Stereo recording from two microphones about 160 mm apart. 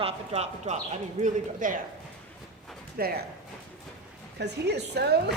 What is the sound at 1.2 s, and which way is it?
Speech, 55° right (ahead or behind).